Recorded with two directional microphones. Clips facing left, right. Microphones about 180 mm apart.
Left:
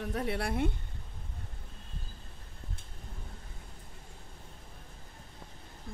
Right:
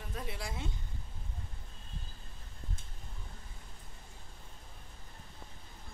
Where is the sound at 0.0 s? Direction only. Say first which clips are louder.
Left 9 dB; 65° left (ahead or behind).